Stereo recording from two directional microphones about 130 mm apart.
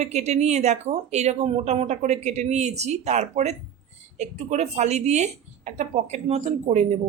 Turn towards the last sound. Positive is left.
turn(degrees=-60)  # may be behind; listen again after turning